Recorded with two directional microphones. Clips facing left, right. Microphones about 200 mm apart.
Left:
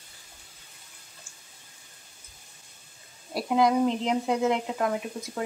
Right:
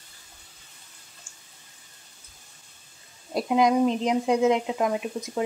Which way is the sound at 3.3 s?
15° right (ahead or behind).